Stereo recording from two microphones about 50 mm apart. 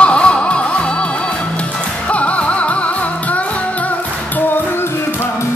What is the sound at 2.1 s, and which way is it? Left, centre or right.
Music, left.